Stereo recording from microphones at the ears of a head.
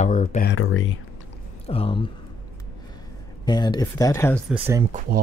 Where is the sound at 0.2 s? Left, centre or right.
Left.